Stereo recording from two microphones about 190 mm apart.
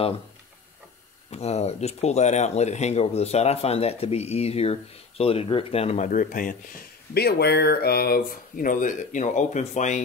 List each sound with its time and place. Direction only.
1.3 s speech: 35° left (ahead or behind)
7.2 s speech: 55° left (ahead or behind); by 10.0 s 40° left (ahead or behind)